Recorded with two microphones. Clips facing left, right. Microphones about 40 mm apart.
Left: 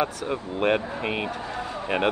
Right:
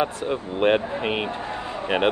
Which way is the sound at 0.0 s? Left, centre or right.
Right.